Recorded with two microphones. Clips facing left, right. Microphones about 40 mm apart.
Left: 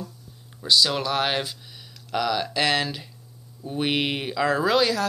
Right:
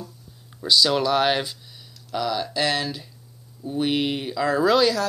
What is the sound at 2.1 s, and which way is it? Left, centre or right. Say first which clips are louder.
Speech: left 1 dB; left.